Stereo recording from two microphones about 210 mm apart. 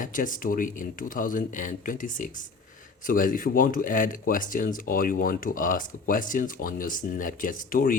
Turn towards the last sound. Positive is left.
turn(degrees=40)  # may be behind; listen again after turning